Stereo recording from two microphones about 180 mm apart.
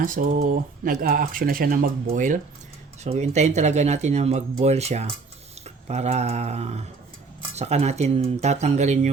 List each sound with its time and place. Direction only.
0.0 s speech: 50° right (ahead or behind)